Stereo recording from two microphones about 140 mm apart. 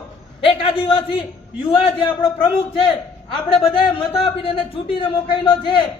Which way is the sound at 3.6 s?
40° left (ahead or behind).